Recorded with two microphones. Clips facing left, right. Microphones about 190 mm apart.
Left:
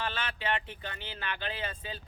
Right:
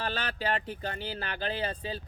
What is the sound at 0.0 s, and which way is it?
Speech, 40° right (ahead or behind).